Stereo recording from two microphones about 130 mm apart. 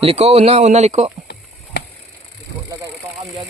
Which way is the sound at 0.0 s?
50° right (ahead or behind).